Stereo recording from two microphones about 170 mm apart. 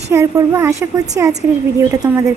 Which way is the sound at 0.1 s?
15° right (ahead or behind).